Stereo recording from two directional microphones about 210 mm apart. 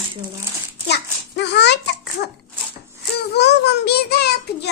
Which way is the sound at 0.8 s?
55° left (ahead or behind).